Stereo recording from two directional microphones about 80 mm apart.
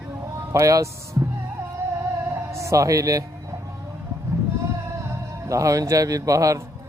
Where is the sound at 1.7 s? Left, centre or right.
Right.